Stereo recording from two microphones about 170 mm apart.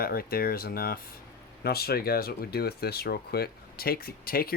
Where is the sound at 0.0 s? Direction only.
60° left (ahead or behind).